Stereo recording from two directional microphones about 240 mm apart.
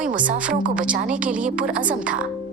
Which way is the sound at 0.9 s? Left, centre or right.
Right.